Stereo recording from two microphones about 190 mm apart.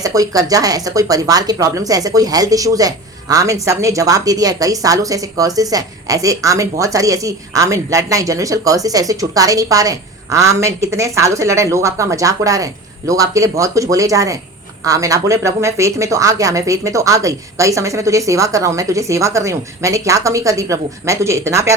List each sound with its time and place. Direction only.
0.0 s speech: 20° right (ahead or behind)